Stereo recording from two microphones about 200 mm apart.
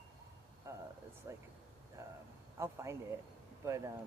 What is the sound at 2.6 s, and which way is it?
Speech, 15° right (ahead or behind).